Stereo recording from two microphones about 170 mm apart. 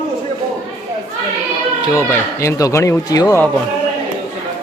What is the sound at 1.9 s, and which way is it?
A man's voice, 15° left (ahead or behind).